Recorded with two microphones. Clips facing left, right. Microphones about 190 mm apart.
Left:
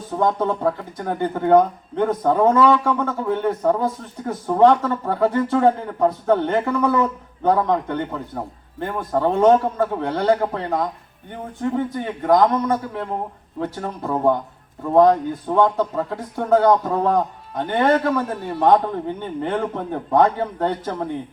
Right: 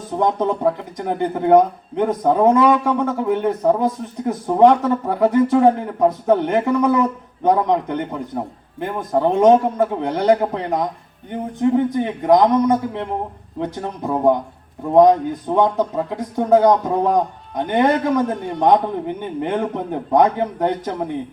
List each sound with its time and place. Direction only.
0.2 s speech: 15° right (ahead or behind)
18.3 s a man's voice: 5° left (ahead or behind)
18.6 s speech: 15° right (ahead or behind)